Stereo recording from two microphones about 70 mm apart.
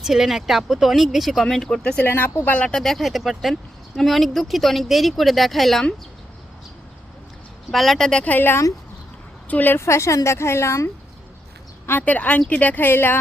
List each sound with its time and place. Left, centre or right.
0.0 s speech: centre
1.8 s a woman's voice: centre
2.0 s a woman's voice: left
2.6 s speech: centre
7.7 s speech: centre
8.3 s a woman's voice: left
9.8 s a woman's voice: left
11.9 s a woman's voice: left